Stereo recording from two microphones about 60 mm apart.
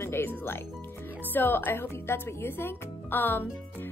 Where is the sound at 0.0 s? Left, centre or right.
Left.